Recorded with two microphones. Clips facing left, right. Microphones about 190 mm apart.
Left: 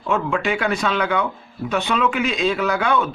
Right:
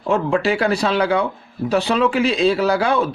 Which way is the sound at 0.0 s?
35° right (ahead or behind).